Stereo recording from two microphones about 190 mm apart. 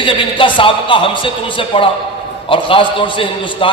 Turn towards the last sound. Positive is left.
turn(degrees=25)  # may be behind; listen again after turning